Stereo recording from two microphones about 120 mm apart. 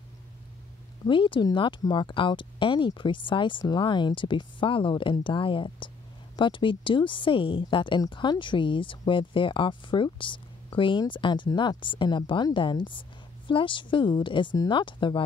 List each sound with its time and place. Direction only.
1.0 s speech: 45° left (ahead or behind)